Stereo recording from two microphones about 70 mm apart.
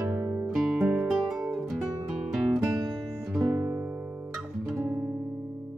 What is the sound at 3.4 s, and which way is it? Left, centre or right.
Music, right.